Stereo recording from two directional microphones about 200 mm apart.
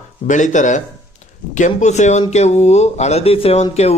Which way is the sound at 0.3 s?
40° left (ahead or behind).